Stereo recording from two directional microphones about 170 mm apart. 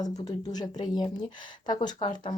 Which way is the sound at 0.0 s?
20° left (ahead or behind).